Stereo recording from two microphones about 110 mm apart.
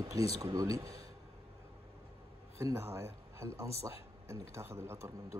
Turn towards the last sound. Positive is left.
turn(degrees=-25)  # may be behind; listen again after turning